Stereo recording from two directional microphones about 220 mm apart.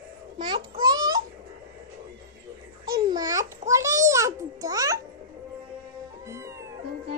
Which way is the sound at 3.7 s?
15° right (ahead or behind).